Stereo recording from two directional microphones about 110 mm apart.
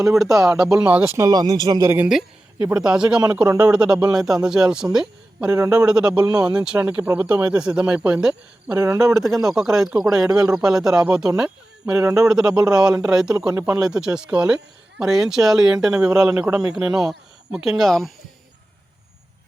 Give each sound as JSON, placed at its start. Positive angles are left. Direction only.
{"t": 0.2, "sound": "speech", "side_deg": 0}
{"t": 1.0, "sound": "speech", "side_deg": -30}
{"t": 2.6, "sound": "speech", "side_deg": -10}
{"t": 6.2, "sound": "speech", "side_deg": -40}
{"t": 6.5, "sound": "speech", "side_deg": -10}